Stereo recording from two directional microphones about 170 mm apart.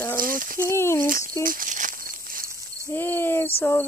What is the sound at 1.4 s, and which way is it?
Crumpling, 55° right (ahead or behind).